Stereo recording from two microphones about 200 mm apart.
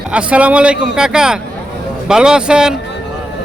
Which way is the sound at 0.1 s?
5° right (ahead or behind).